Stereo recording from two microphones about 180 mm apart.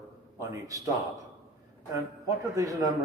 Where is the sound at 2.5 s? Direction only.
20° right (ahead or behind).